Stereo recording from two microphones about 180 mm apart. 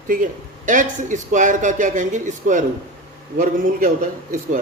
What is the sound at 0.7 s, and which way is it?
A man's voice, 45° right (ahead or behind).